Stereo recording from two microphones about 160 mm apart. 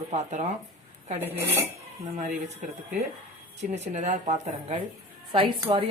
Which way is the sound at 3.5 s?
45° right (ahead or behind).